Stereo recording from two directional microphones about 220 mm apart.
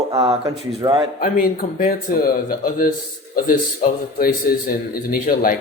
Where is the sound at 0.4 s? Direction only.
20° right (ahead or behind).